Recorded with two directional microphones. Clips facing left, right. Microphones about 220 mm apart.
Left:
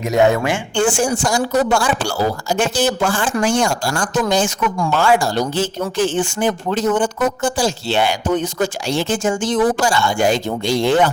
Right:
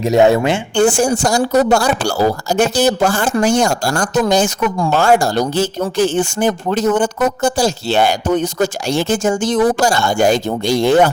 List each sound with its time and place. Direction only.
0.0 s speech: 30° right (ahead or behind)
0.8 s a woman's voice: 40° right (ahead or behind)